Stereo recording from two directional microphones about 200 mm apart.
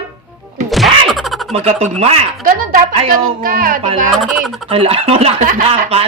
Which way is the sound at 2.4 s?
45° right (ahead or behind).